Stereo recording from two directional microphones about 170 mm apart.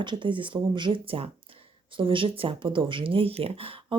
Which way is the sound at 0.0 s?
25° right (ahead or behind).